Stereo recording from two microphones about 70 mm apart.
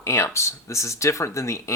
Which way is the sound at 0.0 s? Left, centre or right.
Left.